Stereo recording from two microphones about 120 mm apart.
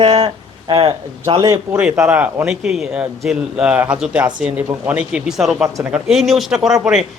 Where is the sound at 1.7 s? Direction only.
10° right (ahead or behind).